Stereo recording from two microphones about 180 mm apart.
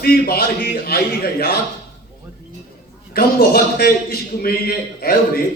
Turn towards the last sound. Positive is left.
turn(degrees=55)  # may be behind; listen again after turning